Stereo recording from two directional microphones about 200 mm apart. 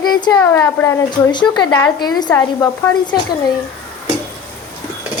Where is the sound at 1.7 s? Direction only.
5° left (ahead or behind).